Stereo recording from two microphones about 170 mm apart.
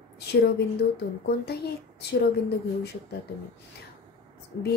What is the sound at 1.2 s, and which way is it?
Speech, 70° left (ahead or behind).